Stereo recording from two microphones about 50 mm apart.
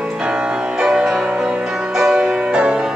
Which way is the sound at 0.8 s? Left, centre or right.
Centre.